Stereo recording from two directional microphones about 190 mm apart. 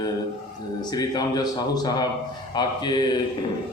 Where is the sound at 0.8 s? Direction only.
20° left (ahead or behind).